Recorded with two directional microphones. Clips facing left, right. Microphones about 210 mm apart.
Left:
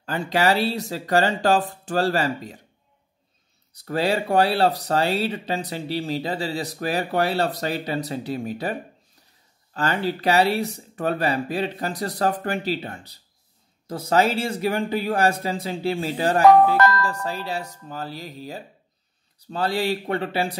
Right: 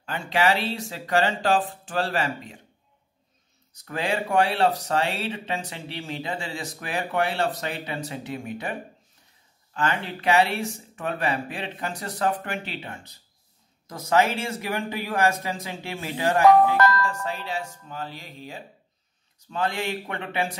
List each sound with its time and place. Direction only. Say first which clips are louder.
0.0 s speech: left 2 dB; 40° left (ahead or behind)
3.7 s speech: left 5 dB; 35° left (ahead or behind)
9.8 s speech: left 4 dB; 35° left (ahead or behind)